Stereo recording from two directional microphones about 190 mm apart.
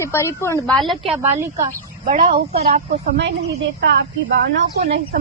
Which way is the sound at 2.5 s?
50° right (ahead or behind).